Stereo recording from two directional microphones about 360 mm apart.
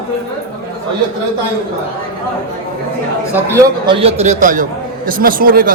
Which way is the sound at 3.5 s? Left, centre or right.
Centre.